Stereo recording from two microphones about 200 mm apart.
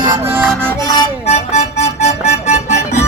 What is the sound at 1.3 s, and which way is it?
Music, 35° left (ahead or behind).